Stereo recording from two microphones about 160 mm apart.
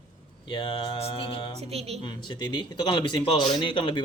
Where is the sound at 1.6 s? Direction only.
40° right (ahead or behind).